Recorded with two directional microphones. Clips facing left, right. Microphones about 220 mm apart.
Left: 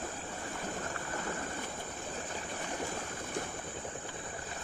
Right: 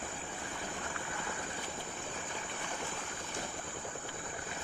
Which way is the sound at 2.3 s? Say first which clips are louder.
Left 3 dB; 40° left (ahead or behind).